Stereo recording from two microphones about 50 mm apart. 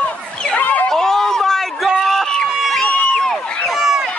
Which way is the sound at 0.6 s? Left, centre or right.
Left.